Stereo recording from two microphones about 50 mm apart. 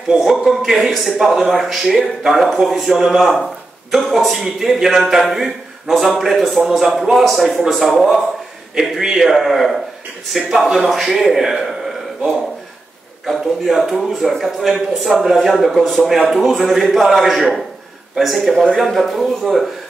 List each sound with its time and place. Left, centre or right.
0.1 s a man's voice: centre
13.2 s a man's voice: centre